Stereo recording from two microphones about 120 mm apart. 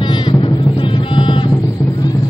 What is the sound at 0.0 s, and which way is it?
Music, 40° left (ahead or behind).